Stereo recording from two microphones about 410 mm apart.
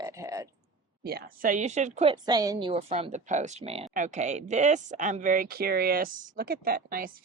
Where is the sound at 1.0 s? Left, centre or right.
Right.